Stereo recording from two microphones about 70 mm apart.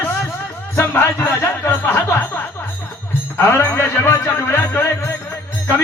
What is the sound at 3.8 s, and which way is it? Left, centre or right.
Music, left.